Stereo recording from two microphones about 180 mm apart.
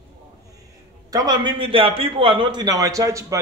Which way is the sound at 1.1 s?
20° right (ahead or behind).